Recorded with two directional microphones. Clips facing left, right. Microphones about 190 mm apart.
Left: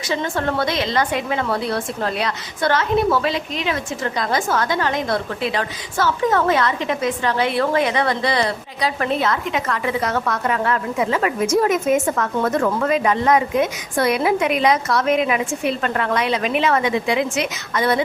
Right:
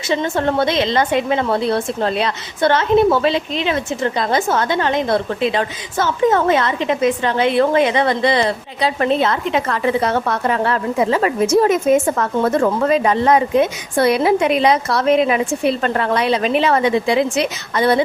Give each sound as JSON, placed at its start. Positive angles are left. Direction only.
{"t": 0.1, "sound": "a woman's voice", "side_deg": -25}